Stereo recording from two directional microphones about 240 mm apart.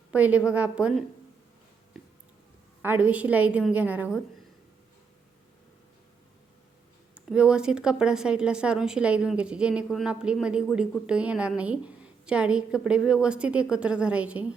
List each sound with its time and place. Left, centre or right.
0.1 s a woman's voice: centre
2.8 s a woman's voice: centre
7.3 s a woman's voice: centre